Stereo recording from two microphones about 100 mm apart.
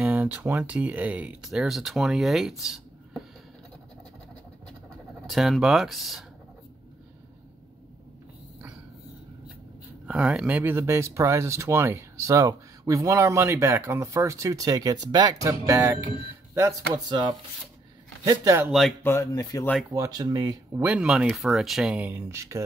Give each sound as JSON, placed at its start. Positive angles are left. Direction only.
{"t": 0.0, "sound": "speech", "side_deg": -15}
{"t": 1.4, "sound": "speech", "side_deg": -5}
{"t": 5.2, "sound": "speech", "side_deg": 0}
{"t": 10.0, "sound": "speech", "side_deg": -10}
{"t": 18.7, "sound": "speech", "side_deg": 0}
{"t": 19.0, "sound": "speech", "side_deg": 30}
{"t": 19.9, "sound": "speech", "side_deg": -35}
{"t": 20.8, "sound": "speech", "side_deg": -10}
{"t": 21.9, "sound": "speech", "side_deg": -20}